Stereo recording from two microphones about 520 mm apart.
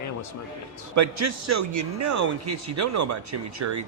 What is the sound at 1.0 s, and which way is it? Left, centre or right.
A man's voice, right.